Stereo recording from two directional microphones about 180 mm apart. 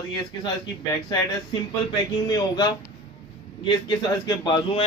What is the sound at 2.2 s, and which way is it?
A man's voice, 20° left (ahead or behind).